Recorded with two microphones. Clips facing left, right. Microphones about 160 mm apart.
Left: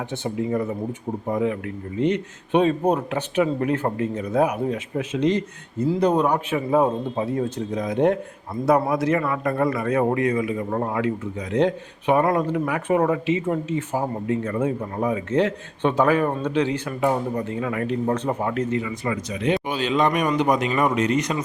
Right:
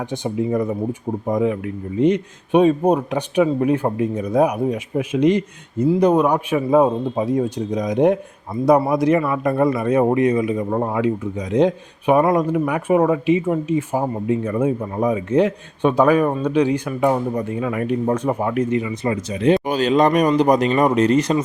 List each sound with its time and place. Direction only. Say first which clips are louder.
0.0 s a man's voice: right 4 dB; 15° right (ahead or behind)
19.0 s speech: right 8 dB; 30° right (ahead or behind)